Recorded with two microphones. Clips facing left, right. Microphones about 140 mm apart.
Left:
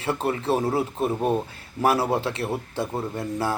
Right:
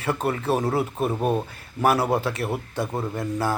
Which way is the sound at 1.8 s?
25° left (ahead or behind).